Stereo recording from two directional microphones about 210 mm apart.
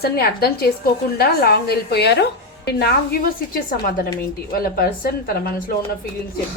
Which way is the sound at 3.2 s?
45° left (ahead or behind).